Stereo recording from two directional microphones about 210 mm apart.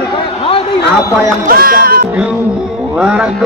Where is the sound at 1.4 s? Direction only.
45° right (ahead or behind).